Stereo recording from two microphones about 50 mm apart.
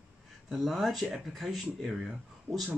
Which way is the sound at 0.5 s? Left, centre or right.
Centre.